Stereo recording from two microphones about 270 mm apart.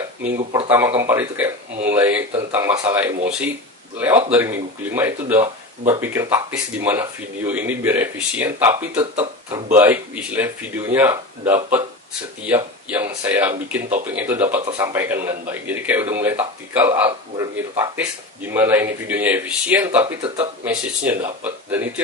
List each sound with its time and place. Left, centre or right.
0.7 s a man's voice: centre
9.1 s speech: right
9.7 s a man's voice: centre